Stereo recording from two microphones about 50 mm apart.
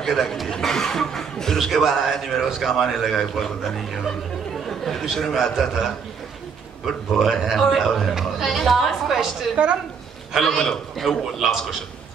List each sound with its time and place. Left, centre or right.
0.0 s a man's voice: centre
4.6 s chatter: centre
5.1 s a man's voice: centre
7.1 s a man's voice: centre
9.6 s a woman's voice: right
10.3 s a man's voice: centre